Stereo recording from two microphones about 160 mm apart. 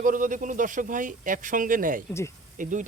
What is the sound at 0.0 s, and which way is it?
Speech, 55° right (ahead or behind).